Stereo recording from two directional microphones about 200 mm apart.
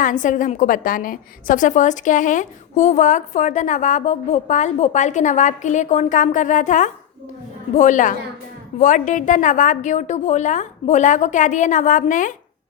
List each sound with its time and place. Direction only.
0.0 s a woman's voice: 40° left (ahead or behind)